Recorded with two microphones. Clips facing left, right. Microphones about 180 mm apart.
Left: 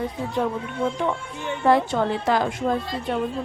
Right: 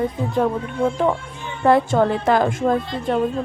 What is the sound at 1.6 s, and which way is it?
Speech, 55° right (ahead or behind).